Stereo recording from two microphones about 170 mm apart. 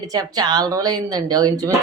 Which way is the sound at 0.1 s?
25° right (ahead or behind).